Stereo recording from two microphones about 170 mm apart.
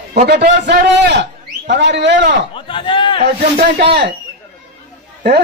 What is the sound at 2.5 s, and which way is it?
Speech, 30° left (ahead or behind).